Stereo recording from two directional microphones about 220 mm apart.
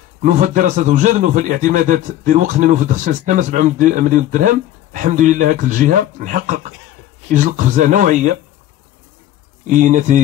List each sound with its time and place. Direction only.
0.2 s a man's voice: 35° right (ahead or behind)
9.7 s a man's voice: 35° right (ahead or behind)